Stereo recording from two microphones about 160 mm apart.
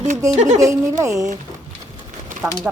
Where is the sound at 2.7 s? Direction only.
5° right (ahead or behind).